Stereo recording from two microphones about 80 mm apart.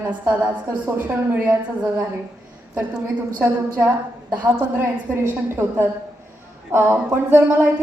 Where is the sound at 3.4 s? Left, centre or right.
Right.